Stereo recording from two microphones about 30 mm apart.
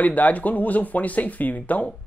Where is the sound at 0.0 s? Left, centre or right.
Left.